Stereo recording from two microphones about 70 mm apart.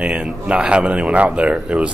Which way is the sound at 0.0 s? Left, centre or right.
Centre.